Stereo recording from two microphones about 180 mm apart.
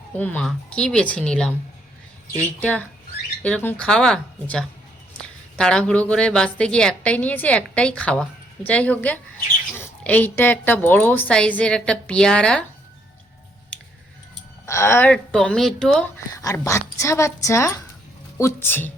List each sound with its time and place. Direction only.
0.1 s speech: 10° left (ahead or behind)
2.6 s a woman's voice: 10° left (ahead or behind)
13.7 s scissors: 5° left (ahead or behind)
14.7 s speech: 15° left (ahead or behind)
16.4 s a woman's voice: 15° left (ahead or behind)